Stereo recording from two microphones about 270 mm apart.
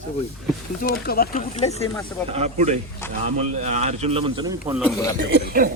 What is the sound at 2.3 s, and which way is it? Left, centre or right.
Speech, right.